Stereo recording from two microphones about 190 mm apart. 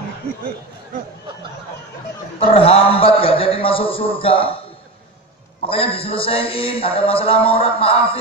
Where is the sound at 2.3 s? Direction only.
30° left (ahead or behind).